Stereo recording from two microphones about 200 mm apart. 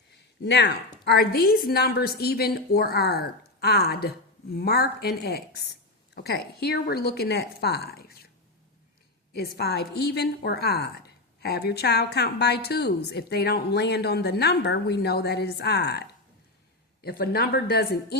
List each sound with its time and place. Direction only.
0.4 s a woman's voice: 60° left (ahead or behind)
9.3 s a woman's voice: 50° left (ahead or behind)